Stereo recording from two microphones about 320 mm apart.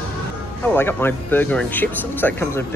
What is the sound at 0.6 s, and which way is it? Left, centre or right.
Speech, centre.